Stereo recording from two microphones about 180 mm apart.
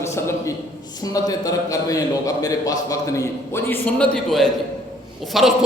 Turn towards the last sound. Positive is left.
turn(degrees=0)  # may be behind; listen again after turning